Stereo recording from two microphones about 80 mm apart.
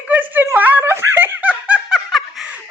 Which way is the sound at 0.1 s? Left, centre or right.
Right.